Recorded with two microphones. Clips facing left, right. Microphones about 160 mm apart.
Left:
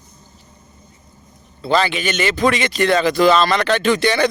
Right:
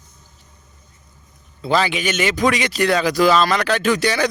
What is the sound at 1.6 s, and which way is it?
Speech, 10° right (ahead or behind).